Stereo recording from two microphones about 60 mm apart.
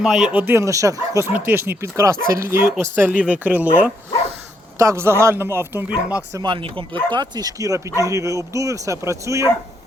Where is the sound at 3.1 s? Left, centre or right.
Right.